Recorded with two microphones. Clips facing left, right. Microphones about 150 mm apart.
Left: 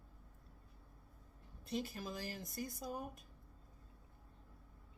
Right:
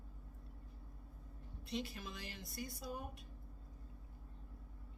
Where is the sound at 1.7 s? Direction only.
40° left (ahead or behind).